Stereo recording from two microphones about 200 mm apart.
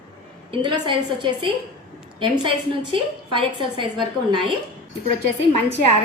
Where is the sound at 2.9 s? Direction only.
25° right (ahead or behind).